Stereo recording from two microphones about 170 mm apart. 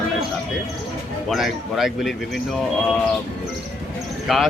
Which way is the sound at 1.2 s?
Centre (ahead or behind).